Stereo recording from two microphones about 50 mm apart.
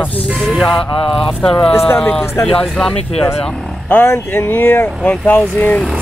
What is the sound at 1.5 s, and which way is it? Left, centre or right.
Speech, left.